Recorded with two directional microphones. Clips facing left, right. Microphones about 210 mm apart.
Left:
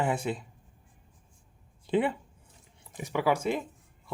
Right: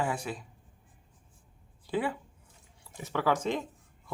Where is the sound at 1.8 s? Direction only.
20° left (ahead or behind).